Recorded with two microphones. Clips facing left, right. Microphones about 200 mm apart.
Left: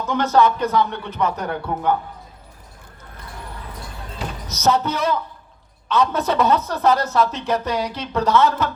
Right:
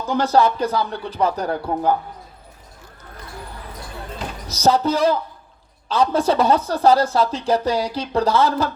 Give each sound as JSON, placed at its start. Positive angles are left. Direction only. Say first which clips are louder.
{"t": 0.1, "sound": "speech", "louder": "even", "side_deg": -30}
{"t": 4.4, "sound": "speech", "louder": "right 2 dB", "side_deg": -30}